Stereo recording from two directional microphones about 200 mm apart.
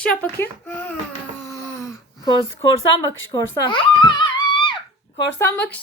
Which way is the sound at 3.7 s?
25° left (ahead or behind).